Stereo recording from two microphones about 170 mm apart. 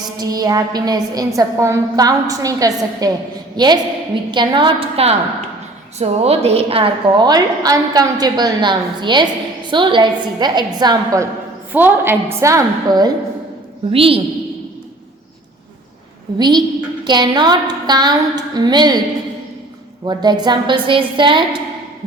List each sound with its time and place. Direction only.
0.2 s a woman's voice: 20° right (ahead or behind)
11.7 s a woman's voice: 10° right (ahead or behind)
13.9 s a woman's voice: 35° right (ahead or behind)
16.4 s a woman's voice: 25° right (ahead or behind)
20.1 s a woman's voice: 25° right (ahead or behind)